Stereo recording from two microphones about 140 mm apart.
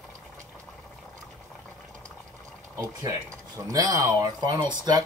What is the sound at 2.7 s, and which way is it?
Speech, 20° right (ahead or behind).